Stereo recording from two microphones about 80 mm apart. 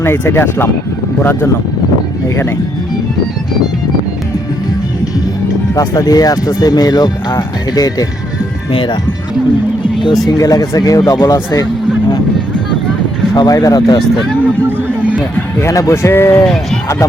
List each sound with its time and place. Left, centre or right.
0.0 s speech: left
5.7 s speech: left
8.7 s speech: left
10.2 s speech: left
13.3 s speech: left
13.6 s speech: left
14.4 s a sound: centre
15.6 s speech: left